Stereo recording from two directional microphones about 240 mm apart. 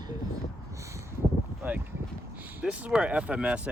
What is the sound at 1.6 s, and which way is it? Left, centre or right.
Speech, centre.